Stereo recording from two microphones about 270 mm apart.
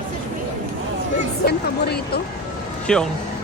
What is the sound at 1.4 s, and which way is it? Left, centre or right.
Speech, left.